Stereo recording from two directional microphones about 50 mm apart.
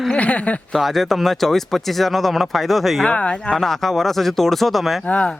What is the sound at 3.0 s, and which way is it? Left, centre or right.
Speech, left.